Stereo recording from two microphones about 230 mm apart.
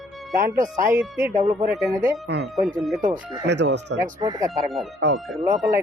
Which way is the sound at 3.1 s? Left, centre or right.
Right.